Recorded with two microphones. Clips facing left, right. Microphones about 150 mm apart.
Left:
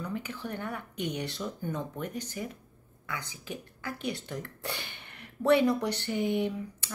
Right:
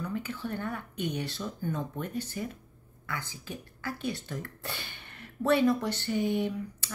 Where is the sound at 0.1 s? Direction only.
15° left (ahead or behind).